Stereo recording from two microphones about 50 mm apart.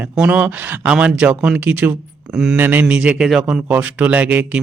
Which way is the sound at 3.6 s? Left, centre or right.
Right.